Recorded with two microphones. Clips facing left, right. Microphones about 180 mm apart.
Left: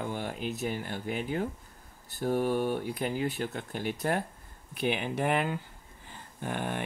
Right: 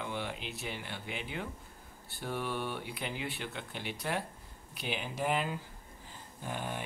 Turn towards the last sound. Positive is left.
turn(degrees=60)  # may be behind; listen again after turning